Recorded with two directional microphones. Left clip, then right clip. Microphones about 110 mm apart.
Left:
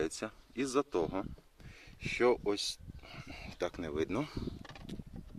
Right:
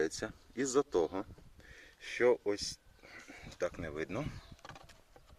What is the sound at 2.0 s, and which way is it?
Speech, 20° left (ahead or behind).